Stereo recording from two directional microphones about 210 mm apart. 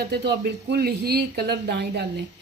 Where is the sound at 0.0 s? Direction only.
50° right (ahead or behind).